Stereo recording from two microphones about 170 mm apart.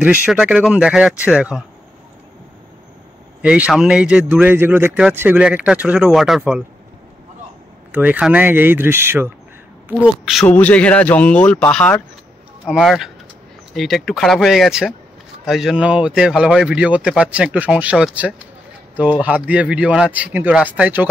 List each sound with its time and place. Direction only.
0.0 s speech: 10° right (ahead or behind)
3.4 s speech: 5° right (ahead or behind)
7.9 s speech: 10° right (ahead or behind)
10.4 s speech: 10° left (ahead or behind)
12.6 s speech: 5° right (ahead or behind)